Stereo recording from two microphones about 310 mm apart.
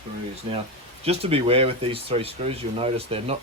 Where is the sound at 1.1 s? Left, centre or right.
Centre.